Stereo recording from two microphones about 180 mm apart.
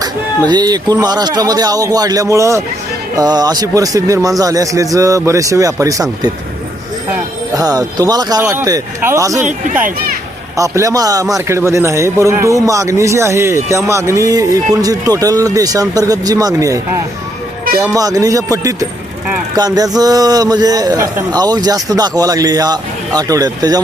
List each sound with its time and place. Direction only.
0.0 s a man's voice: 25° right (ahead or behind)
10.6 s a man's voice: 20° right (ahead or behind)